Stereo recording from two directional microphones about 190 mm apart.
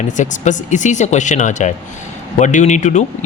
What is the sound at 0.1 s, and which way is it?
Speech, 40° left (ahead or behind).